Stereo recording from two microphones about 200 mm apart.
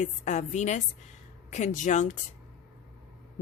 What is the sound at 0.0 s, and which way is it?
A woman's voice, 35° left (ahead or behind).